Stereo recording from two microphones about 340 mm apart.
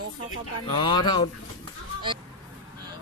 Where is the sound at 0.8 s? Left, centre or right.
Centre.